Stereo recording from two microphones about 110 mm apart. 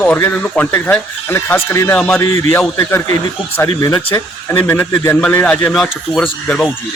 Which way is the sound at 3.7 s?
30° left (ahead or behind).